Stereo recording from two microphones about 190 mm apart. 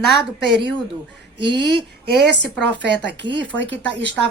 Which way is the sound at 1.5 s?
65° right (ahead or behind).